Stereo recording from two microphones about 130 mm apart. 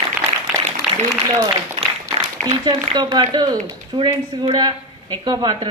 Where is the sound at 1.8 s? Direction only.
35° right (ahead or behind).